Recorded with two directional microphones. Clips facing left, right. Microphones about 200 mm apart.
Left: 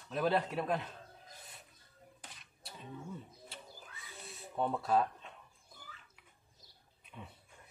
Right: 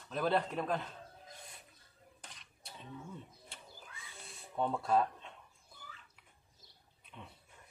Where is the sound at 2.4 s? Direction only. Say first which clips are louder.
Left 1 dB; 5° left (ahead or behind).